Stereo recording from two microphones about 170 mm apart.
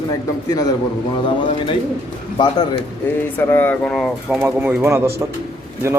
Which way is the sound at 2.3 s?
25° left (ahead or behind).